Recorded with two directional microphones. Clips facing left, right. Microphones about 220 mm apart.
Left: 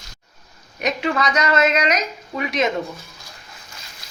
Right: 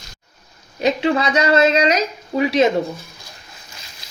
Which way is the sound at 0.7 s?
30° right (ahead or behind).